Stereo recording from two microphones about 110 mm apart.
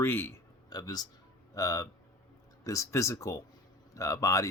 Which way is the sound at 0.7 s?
35° left (ahead or behind).